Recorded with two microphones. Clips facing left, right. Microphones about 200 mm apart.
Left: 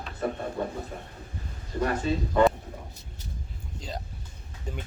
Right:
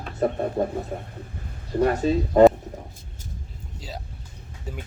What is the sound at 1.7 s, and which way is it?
Speech, 50° right (ahead or behind).